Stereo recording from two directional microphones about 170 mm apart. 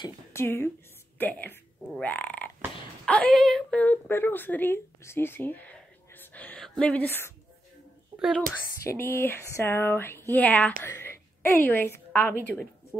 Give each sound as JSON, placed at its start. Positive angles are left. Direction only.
{"t": 0.0, "sound": "a woman's voice", "side_deg": 15}
{"t": 2.0, "sound": "frog", "side_deg": 10}
{"t": 3.1, "sound": "a sound", "side_deg": 5}
{"t": 6.8, "sound": "speech", "side_deg": 10}
{"t": 8.1, "sound": "a sound", "side_deg": -25}
{"t": 8.8, "sound": "a woman's voice", "side_deg": 15}